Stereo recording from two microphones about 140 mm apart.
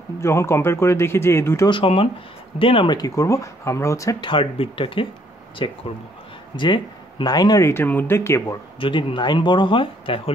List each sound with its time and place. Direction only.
0.2 s speech: 20° left (ahead or behind)
1.7 s speech: 40° left (ahead or behind); by 4.3 s 25° left (ahead or behind)
4.3 s speech: 40° left (ahead or behind); by 8.5 s 20° left (ahead or behind)
8.7 s speech: 35° left (ahead or behind)